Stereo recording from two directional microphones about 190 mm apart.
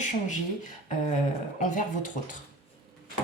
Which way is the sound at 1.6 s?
45° left (ahead or behind).